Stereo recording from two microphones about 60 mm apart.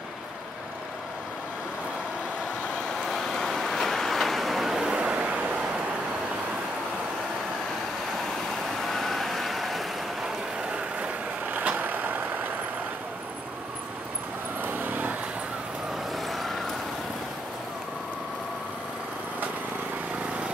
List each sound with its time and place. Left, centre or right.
3.0 s vehicle: centre; by 5.4 s right
8.8 s vehicle: centre
11.0 s vehicle: right
14.6 s vehicle: right
16.1 s vehicle: centre